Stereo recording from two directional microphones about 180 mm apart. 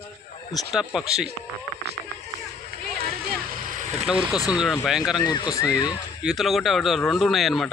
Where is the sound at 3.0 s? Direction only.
50° right (ahead or behind).